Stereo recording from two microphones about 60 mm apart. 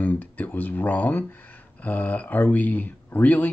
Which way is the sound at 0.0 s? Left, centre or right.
Left.